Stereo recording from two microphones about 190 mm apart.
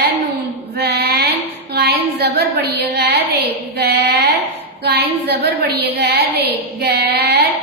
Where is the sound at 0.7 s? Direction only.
60° right (ahead or behind).